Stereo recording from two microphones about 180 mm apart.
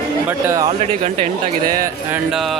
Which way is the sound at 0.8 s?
35° right (ahead or behind).